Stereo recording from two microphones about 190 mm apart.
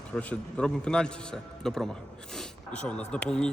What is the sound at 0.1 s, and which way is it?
A man's voice, 5° left (ahead or behind).